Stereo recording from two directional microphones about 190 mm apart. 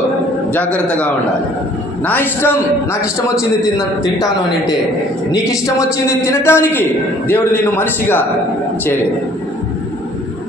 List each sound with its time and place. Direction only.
0.5 s a man's voice: 10° left (ahead or behind)
5.8 s a man's voice: 15° left (ahead or behind)